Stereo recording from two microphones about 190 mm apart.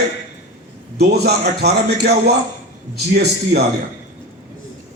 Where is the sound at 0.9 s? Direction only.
60° right (ahead or behind).